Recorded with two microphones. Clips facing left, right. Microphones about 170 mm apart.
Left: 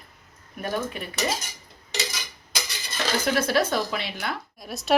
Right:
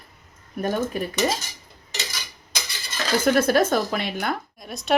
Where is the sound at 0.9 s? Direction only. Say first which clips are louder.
Right 8 dB; 40° right (ahead or behind).